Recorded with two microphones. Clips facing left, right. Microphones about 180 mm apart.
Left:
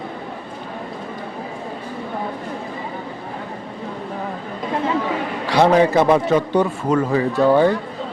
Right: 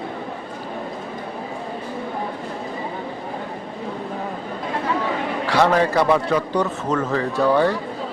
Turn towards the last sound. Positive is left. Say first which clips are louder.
# left 3 dB
turn(degrees=15)  # may be behind; listen again after turning